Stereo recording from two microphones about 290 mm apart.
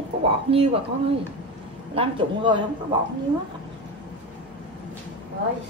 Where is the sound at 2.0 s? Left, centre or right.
Centre.